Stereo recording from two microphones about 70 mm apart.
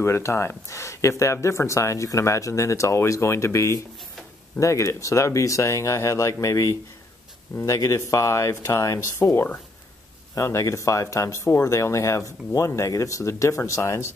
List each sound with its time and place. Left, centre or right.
0.0 s speech: left